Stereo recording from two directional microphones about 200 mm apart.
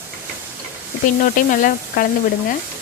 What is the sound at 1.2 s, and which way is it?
Speech, 40° left (ahead or behind).